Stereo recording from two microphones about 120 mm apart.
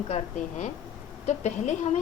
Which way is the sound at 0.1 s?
85° left.